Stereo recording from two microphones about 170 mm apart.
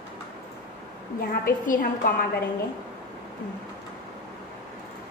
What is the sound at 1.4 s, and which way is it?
Speech, 55° left (ahead or behind).